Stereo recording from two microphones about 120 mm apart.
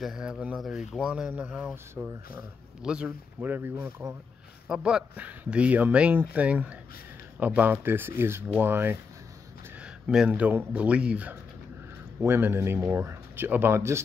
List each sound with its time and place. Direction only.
0.0 s speech: 5° right (ahead or behind)
9.8 s speech: 5° right (ahead or behind)